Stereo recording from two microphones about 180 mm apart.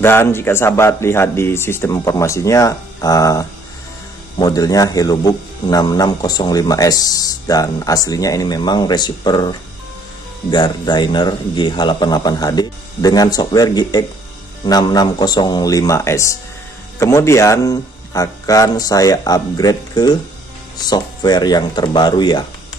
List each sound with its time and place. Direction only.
0.0 s a man's voice: 15° left (ahead or behind)